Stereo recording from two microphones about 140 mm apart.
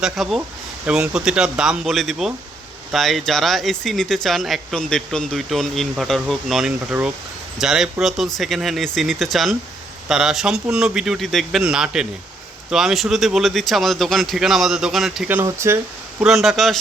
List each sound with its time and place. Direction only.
0.0 s speech: centre (ahead or behind)
15.4 s speech: 20° right (ahead or behind)
16.2 s speech: centre (ahead or behind)